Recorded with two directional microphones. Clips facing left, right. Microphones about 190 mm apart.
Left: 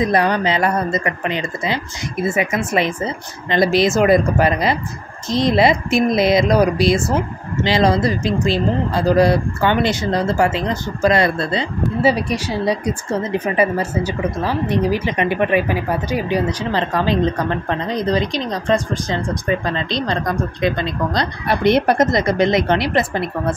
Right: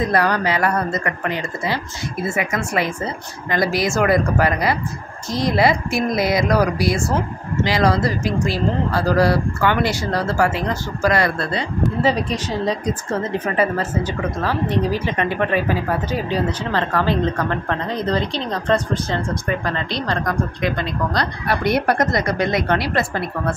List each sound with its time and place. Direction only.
0.0 s speech: 20° left (ahead or behind)
12.0 s a woman's voice: 10° left (ahead or behind)